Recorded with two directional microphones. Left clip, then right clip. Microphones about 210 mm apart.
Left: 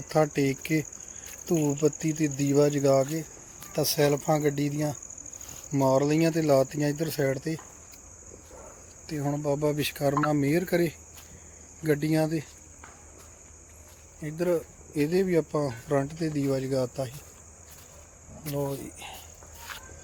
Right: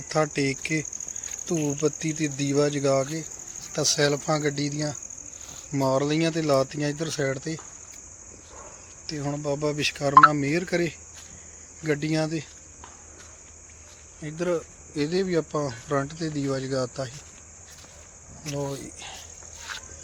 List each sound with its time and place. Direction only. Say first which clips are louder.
0.1 s speech: even; 15° left (ahead or behind)
9.0 s speech: even; 10° left (ahead or behind)
14.2 s speech: even; 5° left (ahead or behind)
18.4 s speech: even; 5° left (ahead or behind)
18.9 s cricket: right 2 dB; centre (ahead or behind)